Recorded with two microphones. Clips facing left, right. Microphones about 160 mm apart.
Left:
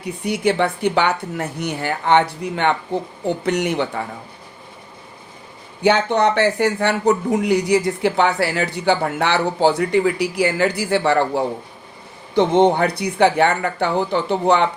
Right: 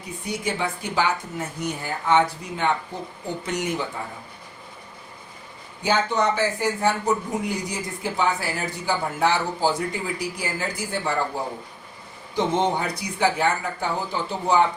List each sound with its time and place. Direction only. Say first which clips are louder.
0.0 s speech: left 9 dB; 65° left (ahead or behind)
5.8 s speech: left 6 dB; 65° left (ahead or behind)
12.3 s speech: left 8 dB; 65° left (ahead or behind)